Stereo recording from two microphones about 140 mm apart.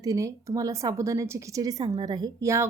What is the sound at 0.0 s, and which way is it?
A woman's voice, 25° right (ahead or behind).